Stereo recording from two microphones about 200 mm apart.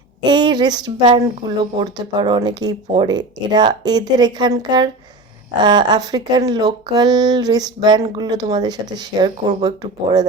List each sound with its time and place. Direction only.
0.3 s speech: 20° right (ahead or behind)